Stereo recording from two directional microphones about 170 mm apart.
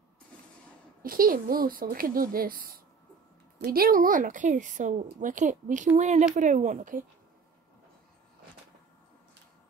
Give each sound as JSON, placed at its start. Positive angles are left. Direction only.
{"t": 1.0, "sound": "speech", "side_deg": -55}